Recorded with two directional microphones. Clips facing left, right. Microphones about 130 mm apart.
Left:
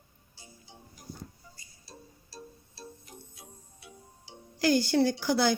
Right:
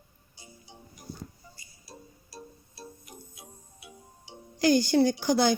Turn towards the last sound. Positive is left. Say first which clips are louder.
# right 2 dB
turn(degrees=-15)  # may be behind; listen again after turning